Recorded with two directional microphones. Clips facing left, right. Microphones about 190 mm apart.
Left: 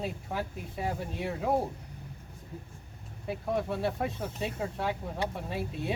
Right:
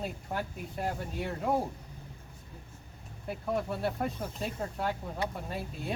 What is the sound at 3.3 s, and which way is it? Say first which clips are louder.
Speech: left 1 dB; centre (ahead or behind).